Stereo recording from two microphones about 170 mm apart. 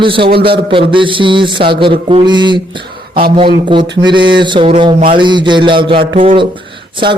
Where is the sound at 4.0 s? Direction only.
30° right (ahead or behind).